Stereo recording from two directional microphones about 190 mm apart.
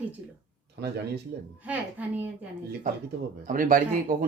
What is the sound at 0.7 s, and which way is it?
Speech, 60° right (ahead or behind).